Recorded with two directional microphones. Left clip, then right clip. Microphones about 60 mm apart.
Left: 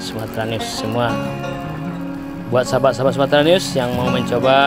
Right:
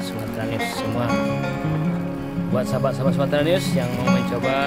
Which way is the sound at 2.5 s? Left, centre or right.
Left.